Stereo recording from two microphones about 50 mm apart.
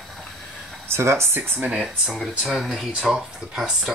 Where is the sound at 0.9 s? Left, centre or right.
Right.